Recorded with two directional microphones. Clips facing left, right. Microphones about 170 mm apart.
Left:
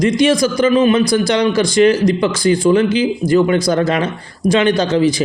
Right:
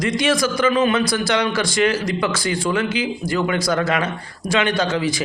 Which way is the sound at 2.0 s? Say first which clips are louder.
Left 8 dB; 35° left (ahead or behind).